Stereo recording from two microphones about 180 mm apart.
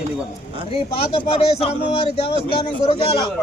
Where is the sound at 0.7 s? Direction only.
30° left (ahead or behind).